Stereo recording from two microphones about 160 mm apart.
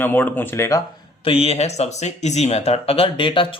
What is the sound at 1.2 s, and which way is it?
Speech, 35° left (ahead or behind).